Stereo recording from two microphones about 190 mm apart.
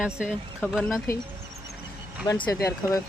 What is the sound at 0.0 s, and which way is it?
Speech, 5° right (ahead or behind).